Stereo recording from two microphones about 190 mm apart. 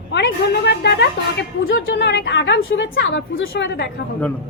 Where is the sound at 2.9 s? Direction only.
70° left (ahead or behind).